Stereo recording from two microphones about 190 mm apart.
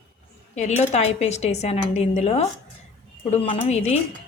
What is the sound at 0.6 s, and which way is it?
A woman's voice, 35° left (ahead or behind).